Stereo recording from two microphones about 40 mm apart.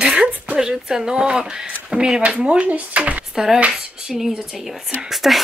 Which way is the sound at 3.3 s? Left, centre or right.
Centre.